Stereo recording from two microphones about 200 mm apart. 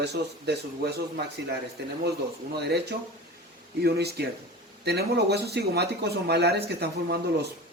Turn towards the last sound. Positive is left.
turn(degrees=-55)  # may be behind; listen again after turning